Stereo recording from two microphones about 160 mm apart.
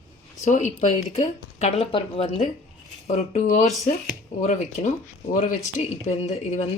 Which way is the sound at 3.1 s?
45° left (ahead or behind).